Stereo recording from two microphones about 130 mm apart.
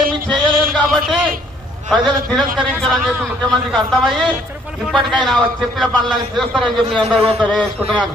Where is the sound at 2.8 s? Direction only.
5° left (ahead or behind).